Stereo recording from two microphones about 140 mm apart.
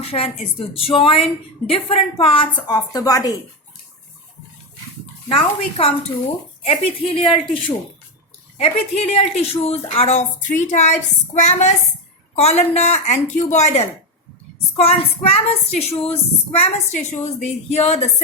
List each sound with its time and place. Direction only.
0.0 s a woman's voice: 45° left (ahead or behind); by 3.3 s 25° left (ahead or behind)
5.3 s a woman's voice: 40° left (ahead or behind)
14.8 s a woman's voice: 45° left (ahead or behind)